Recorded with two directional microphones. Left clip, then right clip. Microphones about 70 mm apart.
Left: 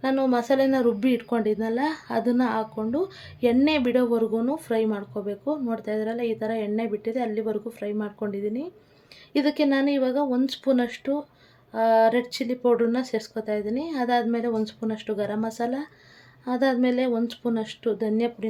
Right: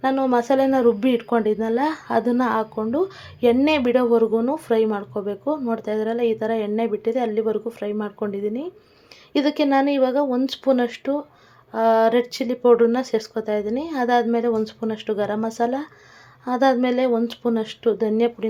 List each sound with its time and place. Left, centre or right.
0.0 s speech: right